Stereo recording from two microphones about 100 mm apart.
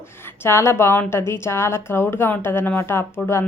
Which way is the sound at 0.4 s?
25° left (ahead or behind).